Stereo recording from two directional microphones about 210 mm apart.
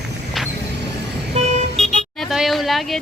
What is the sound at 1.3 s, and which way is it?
Vehicle, 30° right (ahead or behind).